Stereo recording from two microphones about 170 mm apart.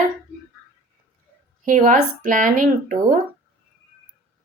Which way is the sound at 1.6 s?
50° right (ahead or behind).